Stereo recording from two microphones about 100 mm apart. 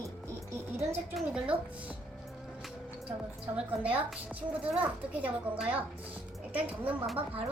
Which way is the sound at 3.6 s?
15° right (ahead or behind).